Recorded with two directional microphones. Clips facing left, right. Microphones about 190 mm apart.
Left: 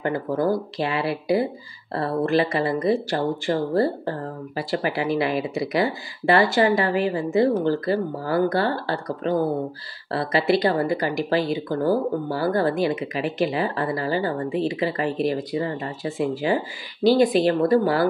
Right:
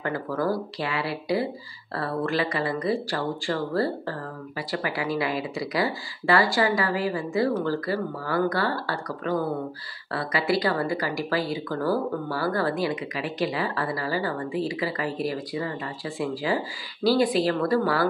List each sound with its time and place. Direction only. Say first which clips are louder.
0.0 s speech: left 4 dB; 20° left (ahead or behind)